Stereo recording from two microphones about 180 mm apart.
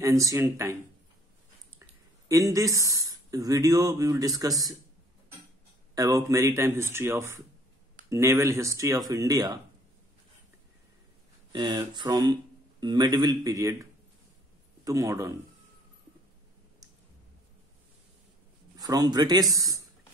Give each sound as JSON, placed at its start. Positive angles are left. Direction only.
{"t": 0.0, "sound": "speech", "side_deg": -20}
{"t": 2.2, "sound": "speech", "side_deg": -20}
{"t": 5.9, "sound": "speech", "side_deg": -20}
{"t": 11.5, "sound": "speech", "side_deg": -25}
{"t": 14.9, "sound": "speech", "side_deg": -15}
{"t": 18.8, "sound": "speech", "side_deg": -20}